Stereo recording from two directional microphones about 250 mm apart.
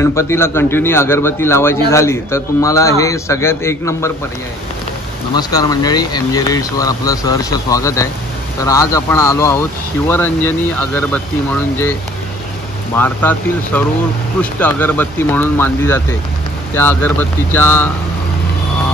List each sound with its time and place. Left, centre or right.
0.0 s a man's voice: centre
5.3 s a man's voice: centre
12.9 s a man's voice: centre